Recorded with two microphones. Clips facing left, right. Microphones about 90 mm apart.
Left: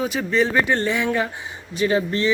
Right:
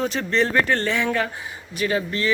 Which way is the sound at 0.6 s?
15° left (ahead or behind).